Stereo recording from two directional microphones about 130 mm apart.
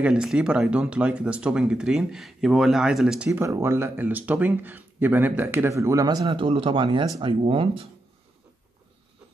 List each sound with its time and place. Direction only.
0.0 s speech: 5° right (ahead or behind)
3.3 s speech: 25° right (ahead or behind); by 7.9 s 45° right (ahead or behind)